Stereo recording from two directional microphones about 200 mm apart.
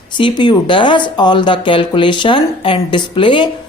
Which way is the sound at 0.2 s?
25° left (ahead or behind).